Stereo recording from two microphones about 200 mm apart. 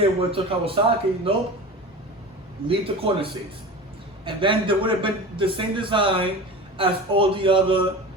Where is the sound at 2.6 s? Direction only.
25° right (ahead or behind).